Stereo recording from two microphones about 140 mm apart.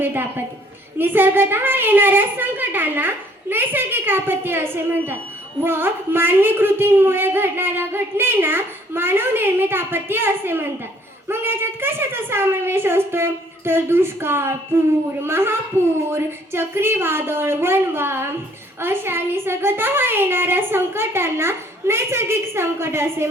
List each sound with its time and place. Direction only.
0.0 s a woman's voice: 15° right (ahead or behind)